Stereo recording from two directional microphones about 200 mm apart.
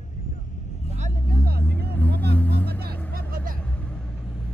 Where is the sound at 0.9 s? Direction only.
45° right (ahead or behind).